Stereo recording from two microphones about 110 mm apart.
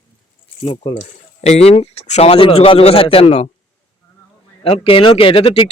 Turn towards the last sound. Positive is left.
turn(degrees=55)  # may be behind; listen again after turning